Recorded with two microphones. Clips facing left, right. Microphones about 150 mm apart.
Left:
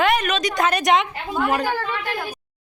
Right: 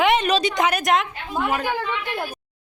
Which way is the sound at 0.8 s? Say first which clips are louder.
Left 2 dB; centre (ahead or behind).